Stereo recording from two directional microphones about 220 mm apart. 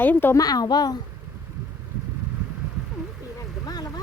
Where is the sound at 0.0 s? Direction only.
10° left (ahead or behind).